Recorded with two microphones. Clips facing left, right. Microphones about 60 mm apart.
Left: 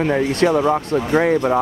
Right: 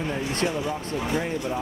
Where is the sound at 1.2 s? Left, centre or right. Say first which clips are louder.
Left 12 dB; left.